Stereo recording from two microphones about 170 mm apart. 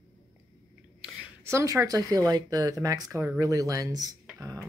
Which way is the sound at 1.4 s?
15° right (ahead or behind).